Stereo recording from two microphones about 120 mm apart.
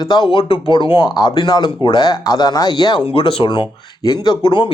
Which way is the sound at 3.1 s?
50° left (ahead or behind).